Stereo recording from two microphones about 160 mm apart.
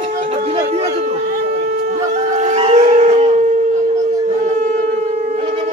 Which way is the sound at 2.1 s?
50° right (ahead or behind).